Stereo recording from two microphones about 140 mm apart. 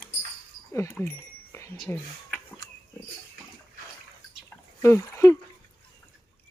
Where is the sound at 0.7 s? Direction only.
20° left (ahead or behind).